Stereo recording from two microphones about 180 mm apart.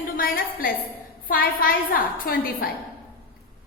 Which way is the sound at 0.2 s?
55° left (ahead or behind).